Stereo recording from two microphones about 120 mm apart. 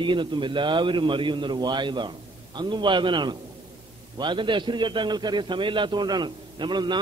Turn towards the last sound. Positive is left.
turn(degrees=-40)  # may be behind; listen again after turning